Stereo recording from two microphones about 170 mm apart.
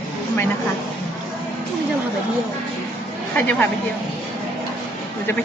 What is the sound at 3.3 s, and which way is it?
Speech, 10° left (ahead or behind).